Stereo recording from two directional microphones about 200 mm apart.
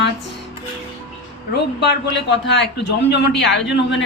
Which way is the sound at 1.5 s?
55° left (ahead or behind).